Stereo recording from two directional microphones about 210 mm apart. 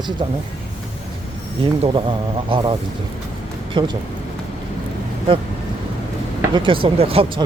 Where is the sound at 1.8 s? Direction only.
25° right (ahead or behind).